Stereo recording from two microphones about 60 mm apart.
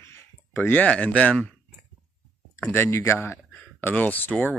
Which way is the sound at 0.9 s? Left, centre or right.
Centre.